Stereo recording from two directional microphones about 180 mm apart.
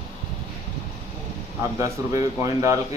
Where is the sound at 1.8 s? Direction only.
15° right (ahead or behind).